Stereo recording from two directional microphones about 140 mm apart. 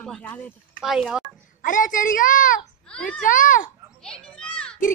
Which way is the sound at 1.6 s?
70° left (ahead or behind).